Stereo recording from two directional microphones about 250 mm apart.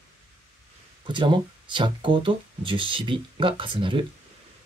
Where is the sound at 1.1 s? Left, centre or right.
Centre.